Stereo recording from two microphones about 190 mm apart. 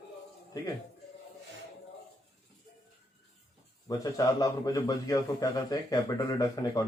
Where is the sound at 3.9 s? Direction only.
20° left (ahead or behind).